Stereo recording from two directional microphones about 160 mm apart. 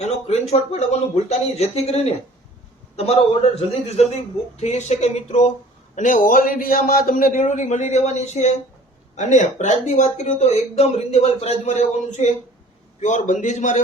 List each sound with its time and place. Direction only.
0.0 s a man's voice: 45° left (ahead or behind)